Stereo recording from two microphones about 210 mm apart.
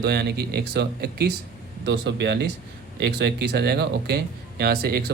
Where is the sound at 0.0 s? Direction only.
50° right (ahead or behind).